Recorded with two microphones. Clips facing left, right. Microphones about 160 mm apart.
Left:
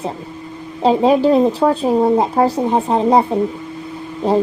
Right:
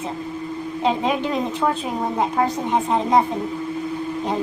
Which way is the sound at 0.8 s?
35° left (ahead or behind).